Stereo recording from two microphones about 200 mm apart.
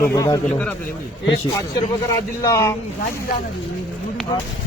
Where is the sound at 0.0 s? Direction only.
15° left (ahead or behind).